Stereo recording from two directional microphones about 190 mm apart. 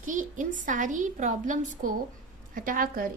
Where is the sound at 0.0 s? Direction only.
45° right (ahead or behind).